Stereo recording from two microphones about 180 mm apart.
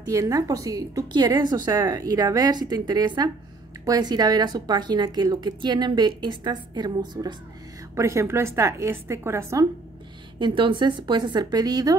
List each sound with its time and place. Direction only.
0.1 s a woman's voice: 20° right (ahead or behind)
10.4 s speech: 25° right (ahead or behind)